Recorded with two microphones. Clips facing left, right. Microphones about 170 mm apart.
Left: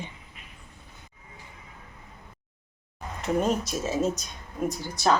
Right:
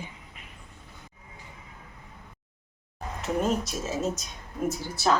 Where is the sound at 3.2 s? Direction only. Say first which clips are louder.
Left 2 dB; centre (ahead or behind).